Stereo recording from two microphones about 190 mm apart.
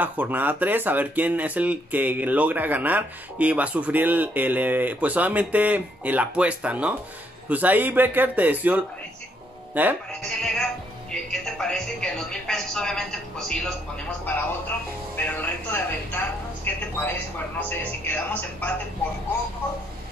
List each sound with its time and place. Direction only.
0.0 s speech: 10° right (ahead or behind)
10.2 s speech: 5° left (ahead or behind)
15.1 s a woman's voice: 10° left (ahead or behind)